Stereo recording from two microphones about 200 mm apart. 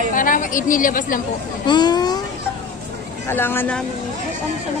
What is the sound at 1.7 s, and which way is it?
Speech, 20° left (ahead or behind).